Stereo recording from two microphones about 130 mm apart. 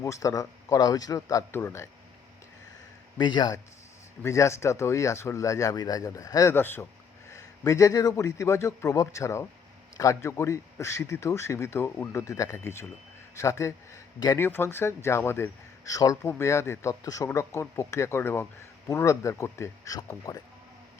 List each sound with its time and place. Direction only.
0.0 s speech: 25° left (ahead or behind)
3.2 s speech: 35° left (ahead or behind)
4.2 s a man's voice: 20° left (ahead or behind)